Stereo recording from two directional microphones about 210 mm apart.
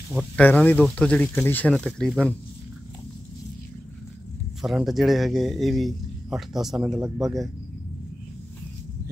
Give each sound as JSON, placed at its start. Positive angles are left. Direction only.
{"t": 0.1, "sound": "speech", "side_deg": 0}
{"t": 4.6, "sound": "speech", "side_deg": 0}